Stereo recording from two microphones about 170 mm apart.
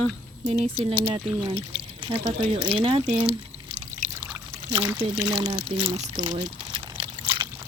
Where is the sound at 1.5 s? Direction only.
30° right (ahead or behind).